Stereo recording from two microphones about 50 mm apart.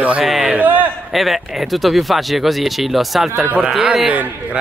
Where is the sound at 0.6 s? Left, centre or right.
Right.